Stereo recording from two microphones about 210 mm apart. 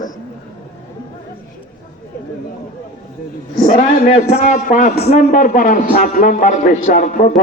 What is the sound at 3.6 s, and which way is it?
A man's voice, 40° left (ahead or behind).